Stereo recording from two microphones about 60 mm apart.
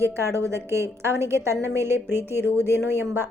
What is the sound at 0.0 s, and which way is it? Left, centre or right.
A woman's voice, right.